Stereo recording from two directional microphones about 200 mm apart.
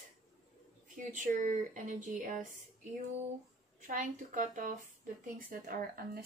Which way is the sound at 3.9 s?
40° right (ahead or behind).